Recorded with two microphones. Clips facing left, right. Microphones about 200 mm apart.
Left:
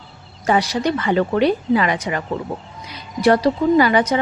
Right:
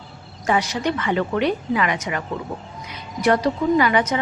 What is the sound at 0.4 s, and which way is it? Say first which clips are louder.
A woman's voice: left 3 dB; 35° left (ahead or behind).